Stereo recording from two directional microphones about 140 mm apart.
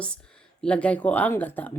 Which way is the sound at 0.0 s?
5° left (ahead or behind).